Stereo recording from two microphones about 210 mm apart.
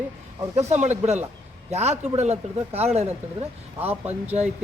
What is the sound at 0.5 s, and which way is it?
Speech, 35° right (ahead or behind).